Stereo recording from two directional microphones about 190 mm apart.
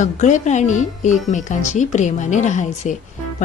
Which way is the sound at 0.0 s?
40° left (ahead or behind).